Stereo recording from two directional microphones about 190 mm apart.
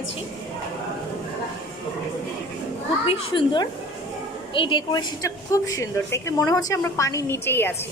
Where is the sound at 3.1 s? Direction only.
30° left (ahead or behind); by 7.8 s 10° left (ahead or behind).